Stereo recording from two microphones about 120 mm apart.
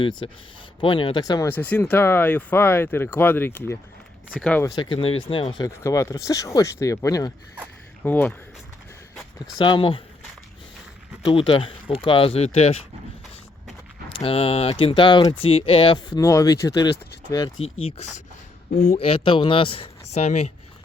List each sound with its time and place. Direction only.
0.0 s speech: 40° left (ahead or behind)
1.5 s speech: 15° left (ahead or behind)
4.8 s speech: 50° left (ahead or behind)
5.5 s speech: 30° left (ahead or behind)
8.0 s speech: 15° left (ahead or behind)
9.6 s speech: 45° left (ahead or behind)
11.3 s speech: 45° left (ahead or behind)
14.1 s speech: 55° left (ahead or behind); by 16.9 s 35° left (ahead or behind)
18.9 s speech: 55° left (ahead or behind)
20.1 s speech: 65° left (ahead or behind)